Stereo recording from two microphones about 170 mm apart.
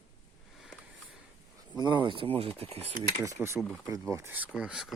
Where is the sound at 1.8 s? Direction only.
25° right (ahead or behind).